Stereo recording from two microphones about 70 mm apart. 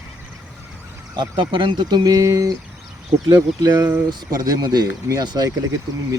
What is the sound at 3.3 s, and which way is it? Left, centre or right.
Speech, right.